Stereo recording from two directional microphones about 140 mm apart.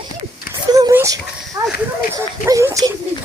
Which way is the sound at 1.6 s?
20° right (ahead or behind).